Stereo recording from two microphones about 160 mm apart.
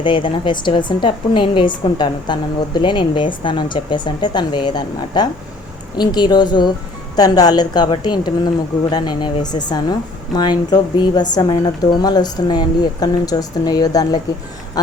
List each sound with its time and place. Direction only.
0.0 s a woman's voice: 30° left (ahead or behind)